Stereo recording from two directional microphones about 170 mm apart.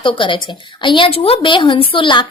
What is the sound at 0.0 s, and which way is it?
Speech, 30° left (ahead or behind).